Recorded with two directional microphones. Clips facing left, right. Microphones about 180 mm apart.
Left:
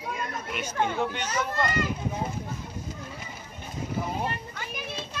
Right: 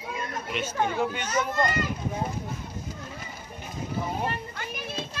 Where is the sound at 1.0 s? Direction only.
5° right (ahead or behind).